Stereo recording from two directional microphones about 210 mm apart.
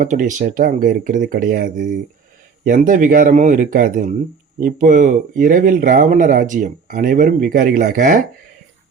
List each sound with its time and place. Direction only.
0.0 s speech: 40° right (ahead or behind)